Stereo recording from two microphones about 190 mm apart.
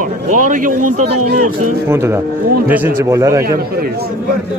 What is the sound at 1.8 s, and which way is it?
Speech, 15° right (ahead or behind).